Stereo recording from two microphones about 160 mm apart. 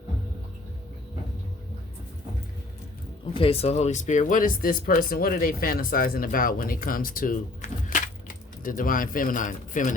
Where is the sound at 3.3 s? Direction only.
35° left (ahead or behind).